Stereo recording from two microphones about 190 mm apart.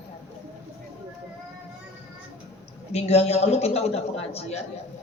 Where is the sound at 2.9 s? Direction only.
35° left (ahead or behind).